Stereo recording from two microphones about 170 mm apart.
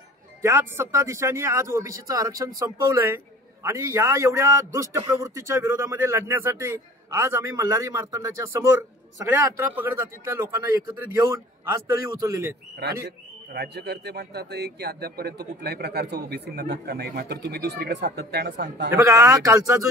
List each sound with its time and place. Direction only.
0.4 s a man's voice: 15° right (ahead or behind)
12.8 s a man's voice: 80° right
18.9 s a man's voice: 15° right (ahead or behind)